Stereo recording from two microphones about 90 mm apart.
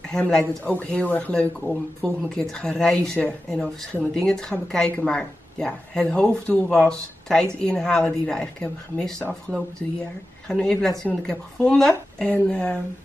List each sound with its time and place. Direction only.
0.1 s speech: 10° left (ahead or behind)
10.5 s speech: 5° left (ahead or behind)